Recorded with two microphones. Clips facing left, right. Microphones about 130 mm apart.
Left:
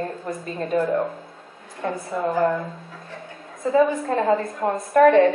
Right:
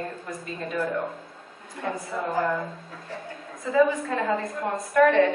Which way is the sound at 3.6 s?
40° left (ahead or behind).